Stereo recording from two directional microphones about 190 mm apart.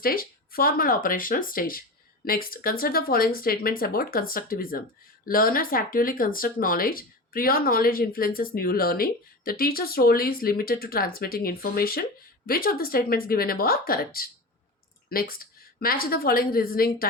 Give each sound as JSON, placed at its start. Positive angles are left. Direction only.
{"t": 0.0, "sound": "speech", "side_deg": 50}